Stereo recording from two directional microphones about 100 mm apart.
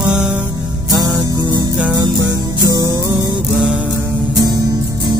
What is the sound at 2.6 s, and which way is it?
Music, 35° right (ahead or behind).